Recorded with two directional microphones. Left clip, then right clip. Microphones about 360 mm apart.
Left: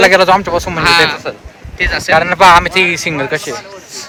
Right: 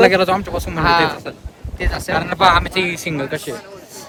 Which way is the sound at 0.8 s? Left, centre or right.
Centre.